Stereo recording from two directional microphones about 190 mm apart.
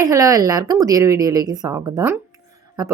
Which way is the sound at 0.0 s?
15° right (ahead or behind).